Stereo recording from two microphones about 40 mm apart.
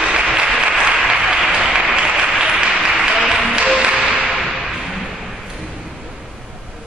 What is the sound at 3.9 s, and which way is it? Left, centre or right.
Music, centre.